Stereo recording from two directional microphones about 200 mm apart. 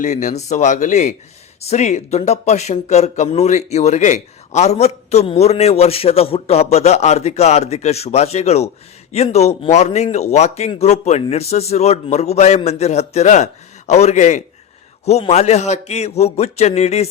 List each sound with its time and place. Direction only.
0.0 s speech: 35° left (ahead or behind)